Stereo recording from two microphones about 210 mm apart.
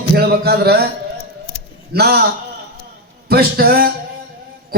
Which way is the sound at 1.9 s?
50° right (ahead or behind).